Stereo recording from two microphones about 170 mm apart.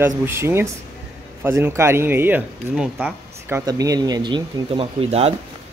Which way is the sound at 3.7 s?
20° right (ahead or behind).